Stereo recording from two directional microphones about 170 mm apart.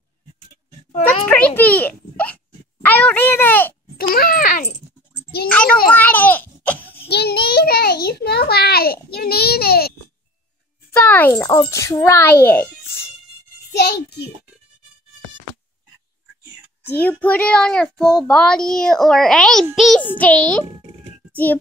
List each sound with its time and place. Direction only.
1.2 s a child's voice: 10° left (ahead or behind)
4.1 s a child's voice: 60° left (ahead or behind)
5.5 s speech: 5° left (ahead or behind)
5.9 s a sound: 10° left (ahead or behind)
7.1 s a child's voice: 70° left (ahead or behind)
10.9 s a child's voice: 10° left (ahead or behind)
11.4 s speech: 20° left (ahead or behind)
16.8 s a child's voice: 10° left (ahead or behind)